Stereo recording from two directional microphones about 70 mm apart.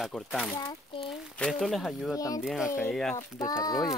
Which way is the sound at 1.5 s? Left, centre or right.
Centre.